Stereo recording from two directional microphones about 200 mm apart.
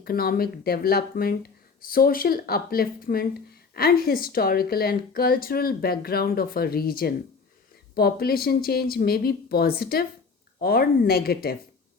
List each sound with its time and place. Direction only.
0.0 s speech: 50° left (ahead or behind)